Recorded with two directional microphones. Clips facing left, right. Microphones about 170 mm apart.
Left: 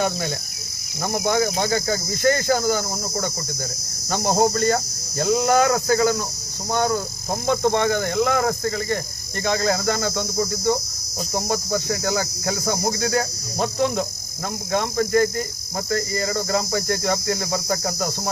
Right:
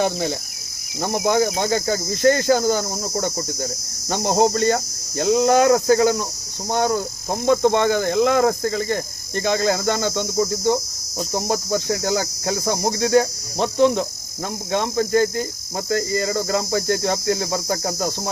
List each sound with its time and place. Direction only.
1.0 s cricket: 30° right (ahead or behind)
2.6 s cricket: 25° right (ahead or behind)
3.2 s cricket: 40° right (ahead or behind)
4.1 s cricket: 20° right (ahead or behind)